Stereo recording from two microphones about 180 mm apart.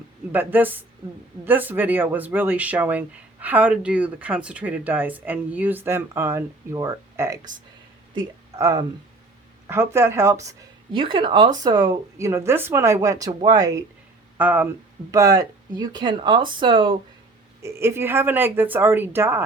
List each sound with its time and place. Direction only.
0.3 s speech: 10° right (ahead or behind)
8.5 s speech: 20° right (ahead or behind)
10.9 s speech: 30° right (ahead or behind)
17.6 s speech: 15° right (ahead or behind)